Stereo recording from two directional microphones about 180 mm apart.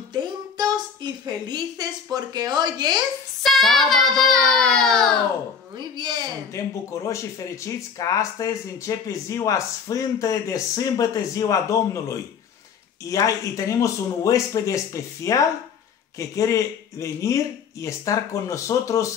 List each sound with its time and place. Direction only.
0.1 s a sound: 25° right (ahead or behind)
2.1 s speech: 20° right (ahead or behind)
3.4 s a child's voice: centre (ahead or behind)
5.8 s speech: 25° right (ahead or behind)
6.5 s speech: 15° left (ahead or behind)